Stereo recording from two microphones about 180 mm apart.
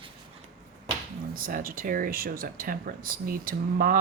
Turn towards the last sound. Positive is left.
turn(degrees=-55)  # may be behind; listen again after turning